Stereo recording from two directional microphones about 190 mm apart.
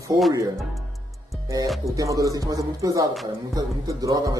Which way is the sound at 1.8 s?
15° right (ahead or behind).